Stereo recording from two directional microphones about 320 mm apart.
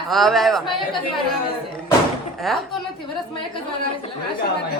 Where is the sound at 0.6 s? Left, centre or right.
Centre.